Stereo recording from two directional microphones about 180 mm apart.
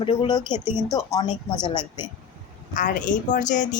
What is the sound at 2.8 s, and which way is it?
Speech, 45° left (ahead or behind).